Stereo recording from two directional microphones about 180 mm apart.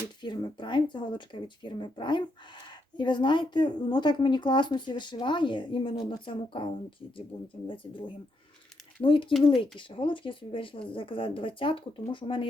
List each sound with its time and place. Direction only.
0.2 s speech: 25° left (ahead or behind)